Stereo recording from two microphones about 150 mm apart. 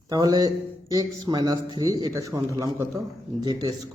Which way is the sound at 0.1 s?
25° right (ahead or behind).